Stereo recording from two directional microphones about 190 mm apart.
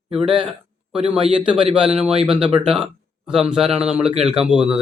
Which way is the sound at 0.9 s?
5° right (ahead or behind).